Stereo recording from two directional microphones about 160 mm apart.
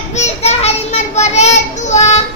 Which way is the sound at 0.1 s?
45° left (ahead or behind).